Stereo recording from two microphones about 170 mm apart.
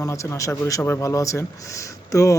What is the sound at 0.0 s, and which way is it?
A man's voice, 20° left (ahead or behind).